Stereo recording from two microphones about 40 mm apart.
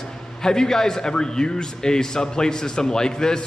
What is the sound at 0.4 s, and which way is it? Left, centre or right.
A man's voice, centre.